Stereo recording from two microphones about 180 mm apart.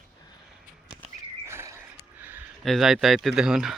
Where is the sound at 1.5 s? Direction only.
15° right (ahead or behind).